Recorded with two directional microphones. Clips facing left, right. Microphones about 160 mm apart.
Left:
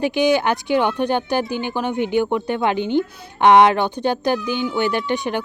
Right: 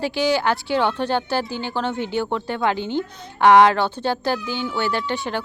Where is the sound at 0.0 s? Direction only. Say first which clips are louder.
Left 3 dB; 20° left (ahead or behind).